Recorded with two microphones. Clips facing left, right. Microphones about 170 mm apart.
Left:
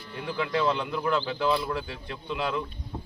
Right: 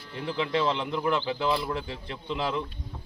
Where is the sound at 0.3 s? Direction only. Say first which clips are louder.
Even; 20° right (ahead or behind).